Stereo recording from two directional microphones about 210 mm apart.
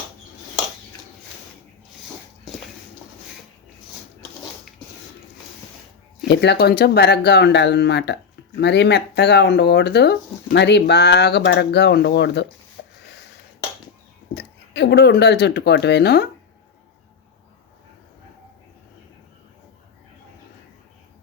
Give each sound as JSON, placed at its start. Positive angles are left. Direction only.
{"t": 6.2, "sound": "speech", "side_deg": 55}
{"t": 12.8, "sound": "a sound", "side_deg": 50}
{"t": 14.3, "sound": "speech", "side_deg": 55}